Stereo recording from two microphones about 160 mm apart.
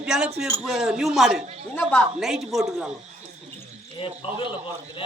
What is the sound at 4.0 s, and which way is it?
Speech, 30° left (ahead or behind).